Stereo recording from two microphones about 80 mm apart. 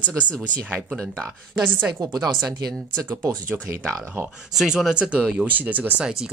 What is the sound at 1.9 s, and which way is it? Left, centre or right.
Speech, right.